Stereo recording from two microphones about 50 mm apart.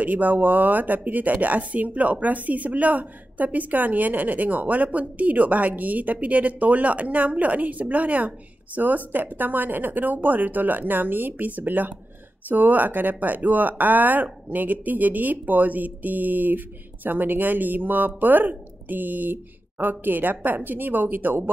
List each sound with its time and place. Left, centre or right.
0.0 s speech: right